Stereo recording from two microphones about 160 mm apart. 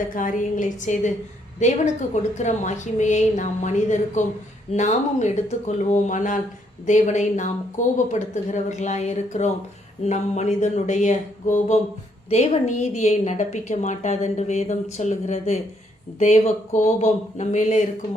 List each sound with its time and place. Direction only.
0.1 s a woman's voice: 55° left (ahead or behind)